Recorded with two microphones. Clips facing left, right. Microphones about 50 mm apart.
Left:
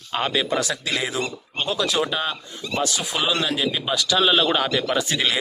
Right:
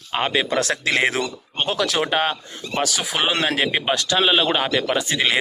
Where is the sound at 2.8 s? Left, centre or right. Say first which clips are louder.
Right 2 dB; right.